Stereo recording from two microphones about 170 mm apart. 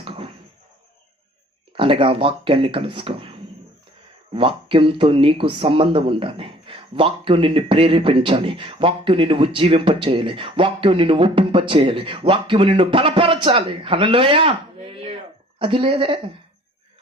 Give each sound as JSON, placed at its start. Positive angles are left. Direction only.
{"t": 0.0, "sound": "a sound", "side_deg": -30}
{"t": 1.7, "sound": "speech", "side_deg": -30}
{"t": 4.4, "sound": "speech", "side_deg": -30}
{"t": 15.5, "sound": "speech", "side_deg": -30}